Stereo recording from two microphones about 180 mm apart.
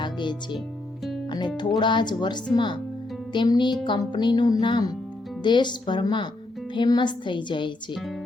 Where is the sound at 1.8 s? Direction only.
25° left (ahead or behind).